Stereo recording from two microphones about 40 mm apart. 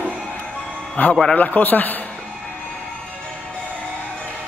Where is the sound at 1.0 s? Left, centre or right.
Left.